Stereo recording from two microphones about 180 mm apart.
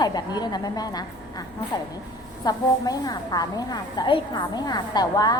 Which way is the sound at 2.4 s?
20° left (ahead or behind).